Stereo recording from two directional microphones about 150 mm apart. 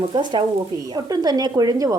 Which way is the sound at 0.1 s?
30° right (ahead or behind).